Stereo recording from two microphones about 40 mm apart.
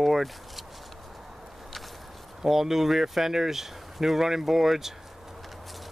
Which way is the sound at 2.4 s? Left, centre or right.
Centre.